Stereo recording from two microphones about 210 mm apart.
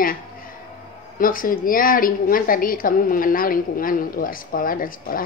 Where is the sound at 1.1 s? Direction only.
40° left (ahead or behind).